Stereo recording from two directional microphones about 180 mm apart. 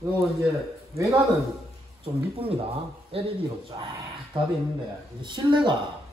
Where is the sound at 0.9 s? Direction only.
15° right (ahead or behind).